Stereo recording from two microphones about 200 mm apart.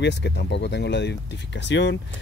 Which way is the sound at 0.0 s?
60° left (ahead or behind).